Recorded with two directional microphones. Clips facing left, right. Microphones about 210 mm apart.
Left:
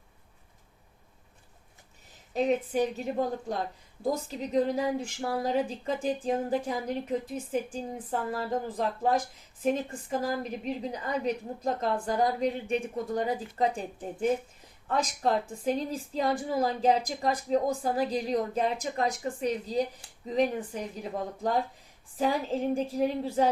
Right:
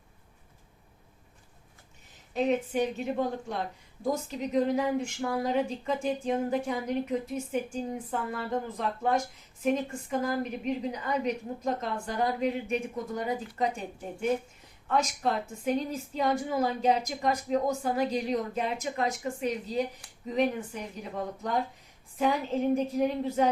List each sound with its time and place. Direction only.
2.3 s a woman's voice: 35° left (ahead or behind)